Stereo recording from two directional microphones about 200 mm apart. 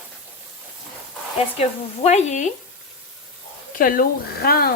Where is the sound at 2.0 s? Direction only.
35° left (ahead or behind).